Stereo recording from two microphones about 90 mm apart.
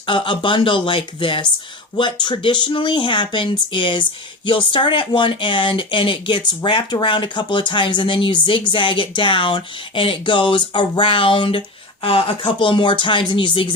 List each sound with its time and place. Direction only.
0.0 s speech: 65° left (ahead or behind)
12.0 s speech: 90° left; by 13.7 s 65° left (ahead or behind)